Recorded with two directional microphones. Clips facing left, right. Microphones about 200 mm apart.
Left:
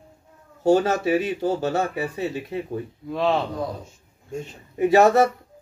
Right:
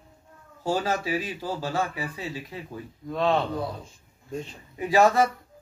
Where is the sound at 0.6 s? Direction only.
60° left (ahead or behind).